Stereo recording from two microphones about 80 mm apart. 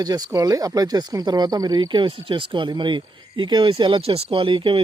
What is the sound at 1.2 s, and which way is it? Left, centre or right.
Speech, right.